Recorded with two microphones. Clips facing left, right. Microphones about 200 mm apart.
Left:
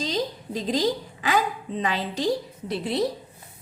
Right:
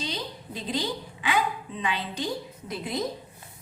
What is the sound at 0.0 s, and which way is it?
A woman's voice, 40° left (ahead or behind).